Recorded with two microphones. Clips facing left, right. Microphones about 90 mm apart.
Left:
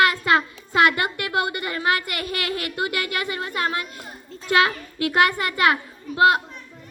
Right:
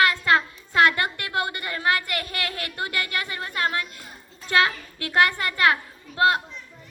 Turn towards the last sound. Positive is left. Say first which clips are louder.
# left 3 dB
turn(degrees=15)  # may be behind; listen again after turning